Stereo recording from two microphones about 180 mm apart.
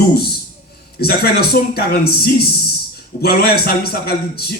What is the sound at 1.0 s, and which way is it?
A man's voice, 60° left (ahead or behind).